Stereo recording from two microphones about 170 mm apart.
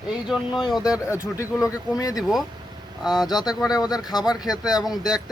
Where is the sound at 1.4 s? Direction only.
20° left (ahead or behind).